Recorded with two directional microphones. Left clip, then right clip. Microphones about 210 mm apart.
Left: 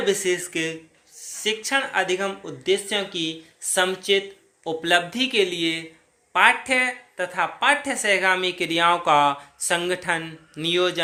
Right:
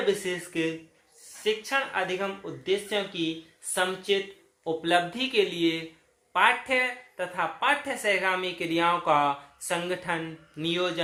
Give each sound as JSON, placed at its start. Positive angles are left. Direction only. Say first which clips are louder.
{"t": 0.0, "sound": "speech", "louder": "left 5 dB", "side_deg": 45}